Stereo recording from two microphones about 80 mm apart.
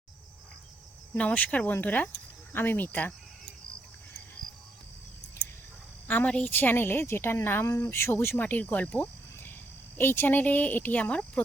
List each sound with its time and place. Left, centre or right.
1.3 s a woman's voice: centre
6.1 s a woman's voice: centre
8.4 s a woman's voice: centre